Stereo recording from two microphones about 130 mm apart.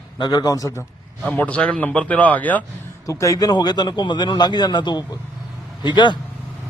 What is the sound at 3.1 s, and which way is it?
A man's voice, 25° left (ahead or behind).